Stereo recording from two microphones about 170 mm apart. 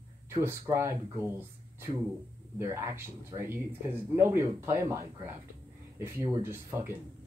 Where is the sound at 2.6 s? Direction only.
15° right (ahead or behind).